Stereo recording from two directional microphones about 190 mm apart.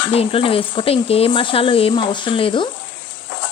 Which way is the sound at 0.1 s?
30° left (ahead or behind).